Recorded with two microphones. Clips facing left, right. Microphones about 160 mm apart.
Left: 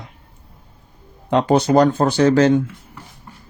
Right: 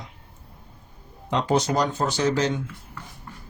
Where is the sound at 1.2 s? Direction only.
55° left (ahead or behind).